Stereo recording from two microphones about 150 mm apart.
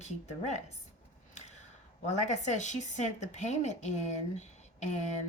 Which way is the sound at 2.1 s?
50° left (ahead or behind).